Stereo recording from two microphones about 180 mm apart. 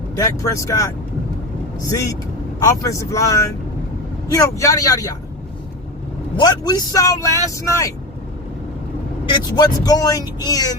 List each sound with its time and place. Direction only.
0.2 s speech: 20° left (ahead or behind)
1.9 s speech: 20° left (ahead or behind)
6.3 s speech: 20° left (ahead or behind)
9.6 s speech: 20° left (ahead or behind)